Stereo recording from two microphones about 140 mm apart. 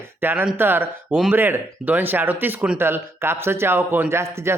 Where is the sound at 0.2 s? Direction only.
15° right (ahead or behind).